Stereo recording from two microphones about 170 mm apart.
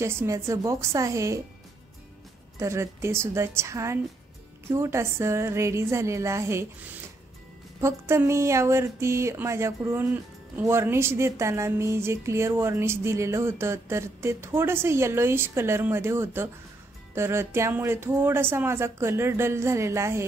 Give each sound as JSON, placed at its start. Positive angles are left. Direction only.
{"t": 0.0, "sound": "speech", "side_deg": -15}
{"t": 2.6, "sound": "speech", "side_deg": -15}
{"t": 7.8, "sound": "speech", "side_deg": -15}